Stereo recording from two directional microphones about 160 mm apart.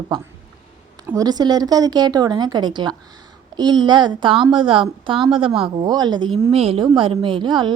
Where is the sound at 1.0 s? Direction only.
20° right (ahead or behind).